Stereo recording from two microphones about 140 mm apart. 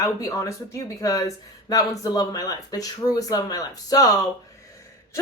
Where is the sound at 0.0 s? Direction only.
25° left (ahead or behind).